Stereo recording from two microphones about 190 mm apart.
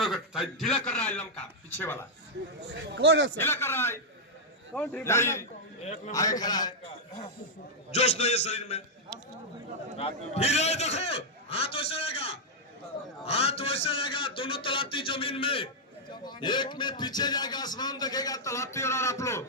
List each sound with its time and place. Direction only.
0.0 s a man's voice: centre (ahead or behind)
2.6 s a man's voice: 65° right (ahead or behind); by 3.3 s 90° right
3.3 s a man's voice: 10° left (ahead or behind)
5.8 s a man's voice: 35° left (ahead or behind)
6.4 s a man's voice: 20° left (ahead or behind)
7.9 s a man's voice: 35° left (ahead or behind)
10.0 s a man's voice: 35° left (ahead or behind); by 19.5 s 15° left (ahead or behind)